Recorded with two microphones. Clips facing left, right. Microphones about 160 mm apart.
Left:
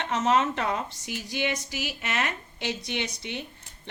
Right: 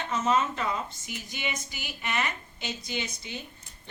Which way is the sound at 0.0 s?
70° left (ahead or behind).